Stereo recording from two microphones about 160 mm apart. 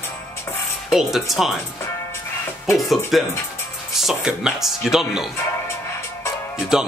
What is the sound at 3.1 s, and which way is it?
Speech, centre (ahead or behind).